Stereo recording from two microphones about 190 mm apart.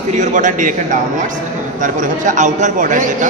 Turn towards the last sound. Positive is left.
turn(degrees=-40)  # may be behind; listen again after turning